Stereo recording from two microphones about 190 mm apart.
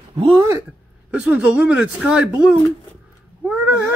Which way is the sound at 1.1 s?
5° right (ahead or behind).